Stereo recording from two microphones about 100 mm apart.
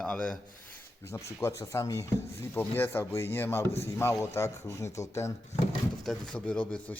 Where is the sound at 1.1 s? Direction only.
30° left (ahead or behind).